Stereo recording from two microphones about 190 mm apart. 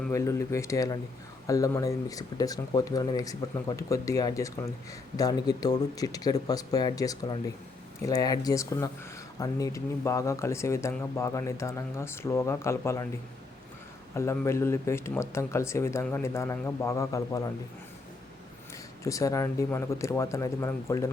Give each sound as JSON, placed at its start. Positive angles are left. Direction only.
{"t": 0.1, "sound": "speech", "side_deg": 15}
{"t": 14.2, "sound": "speech", "side_deg": 15}
{"t": 19.0, "sound": "speech", "side_deg": 15}